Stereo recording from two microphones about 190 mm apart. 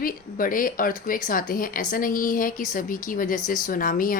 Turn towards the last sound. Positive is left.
turn(degrees=45)  # may be behind; listen again after turning